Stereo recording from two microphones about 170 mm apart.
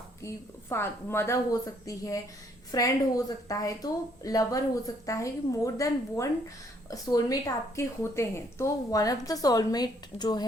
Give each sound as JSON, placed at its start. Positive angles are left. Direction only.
{"t": 0.3, "sound": "a woman's voice", "side_deg": 15}